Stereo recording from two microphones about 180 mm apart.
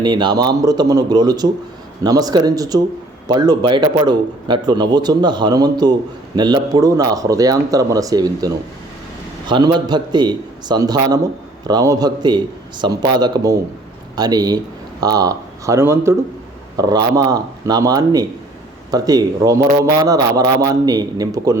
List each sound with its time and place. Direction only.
0.0 s a man's voice: 25° right (ahead or behind)